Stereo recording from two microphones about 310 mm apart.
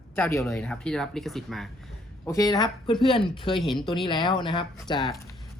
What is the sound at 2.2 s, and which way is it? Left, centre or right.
Speech, centre.